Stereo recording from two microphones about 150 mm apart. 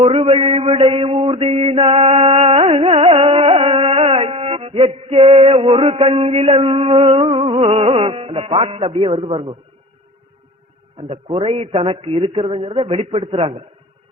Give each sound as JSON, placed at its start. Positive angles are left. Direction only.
{"t": 0.0, "sound": "mantra", "side_deg": -40}
{"t": 2.8, "sound": "carnatic music", "side_deg": -40}
{"t": 6.6, "sound": "mantra", "side_deg": -40}
{"t": 11.1, "sound": "mantra", "side_deg": -40}